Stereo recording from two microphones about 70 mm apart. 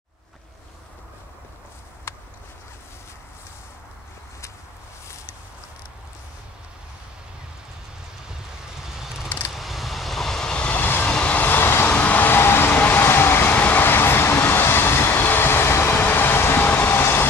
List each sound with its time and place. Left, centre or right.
8.8 s vehicle: centre; by 11.1 s left
11.1 s vehicle: centre; by 17.3 s left